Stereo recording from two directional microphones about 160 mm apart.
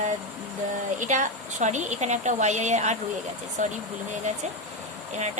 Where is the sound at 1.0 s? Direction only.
50° right (ahead or behind).